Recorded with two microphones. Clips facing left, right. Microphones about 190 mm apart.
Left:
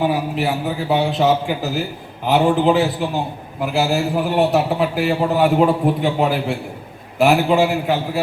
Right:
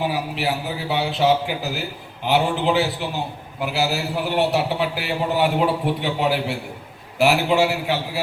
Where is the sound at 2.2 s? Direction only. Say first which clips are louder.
Left 5 dB; 40° left (ahead or behind).